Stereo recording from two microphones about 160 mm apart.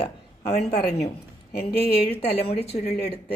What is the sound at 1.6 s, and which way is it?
Speech, 80° left.